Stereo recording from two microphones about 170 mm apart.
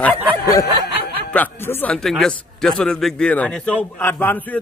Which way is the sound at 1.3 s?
10° left (ahead or behind).